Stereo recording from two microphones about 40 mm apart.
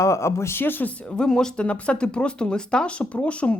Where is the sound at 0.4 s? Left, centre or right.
Left.